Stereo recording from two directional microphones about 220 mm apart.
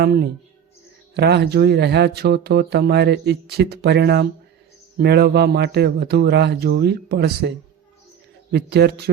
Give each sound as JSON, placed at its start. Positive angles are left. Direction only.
{"t": 0.0, "sound": "speech", "side_deg": -45}
{"t": 8.5, "sound": "speech", "side_deg": -50}